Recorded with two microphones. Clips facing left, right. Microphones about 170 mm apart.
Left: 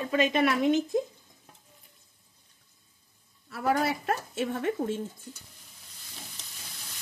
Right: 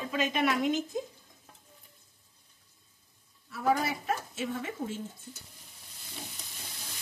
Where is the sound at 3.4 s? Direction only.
65° left (ahead or behind).